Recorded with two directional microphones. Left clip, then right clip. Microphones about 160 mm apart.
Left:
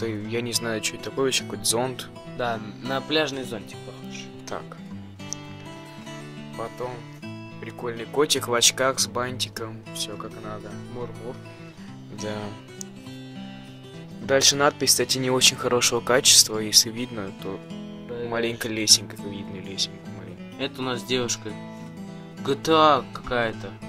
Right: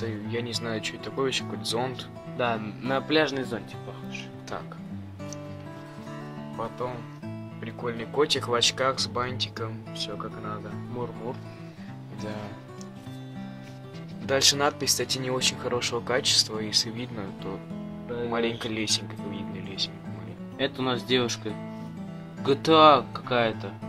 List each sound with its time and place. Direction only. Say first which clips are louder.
0.0 s speech: left 4 dB; 55° left (ahead or behind)
2.3 s speech: even; 5° left (ahead or behind)
6.5 s music: even; 55° left (ahead or behind)
7.6 s speech: left 1 dB; 55° left (ahead or behind)
14.2 s speech: left 4 dB; 40° left (ahead or behind)
18.3 s speech: left 3 dB; 40° left (ahead or behind)
20.5 s speech: right 1 dB; 5° left (ahead or behind)